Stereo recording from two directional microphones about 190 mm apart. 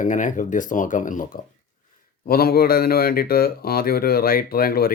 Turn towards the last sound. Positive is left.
turn(degrees=50)  # may be behind; listen again after turning